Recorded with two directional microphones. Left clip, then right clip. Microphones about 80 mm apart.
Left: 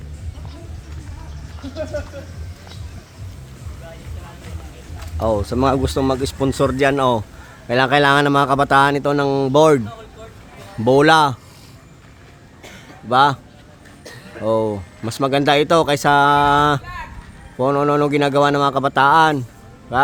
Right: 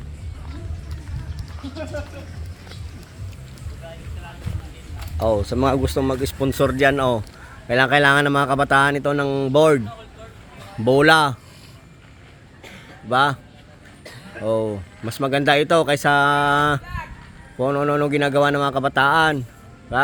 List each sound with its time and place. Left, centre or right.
5.1 s speech: centre
5.6 s speech: left
6.9 s speech: left
10.8 s speech: left
13.1 s speech: left
14.4 s speech: left